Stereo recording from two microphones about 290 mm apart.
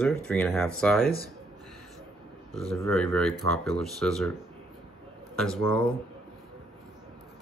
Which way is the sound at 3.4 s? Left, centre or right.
Right.